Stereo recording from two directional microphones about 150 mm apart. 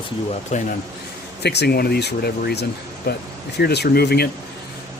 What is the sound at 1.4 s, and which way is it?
Speech, 90° left.